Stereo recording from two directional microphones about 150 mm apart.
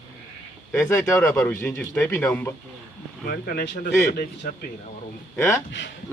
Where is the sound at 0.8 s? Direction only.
20° left (ahead or behind).